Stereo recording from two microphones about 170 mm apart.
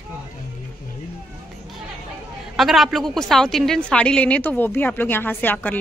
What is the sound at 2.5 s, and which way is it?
A woman's voice, centre (ahead or behind).